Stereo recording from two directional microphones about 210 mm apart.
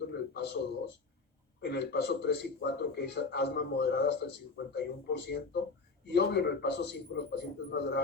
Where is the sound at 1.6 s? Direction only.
50° left (ahead or behind).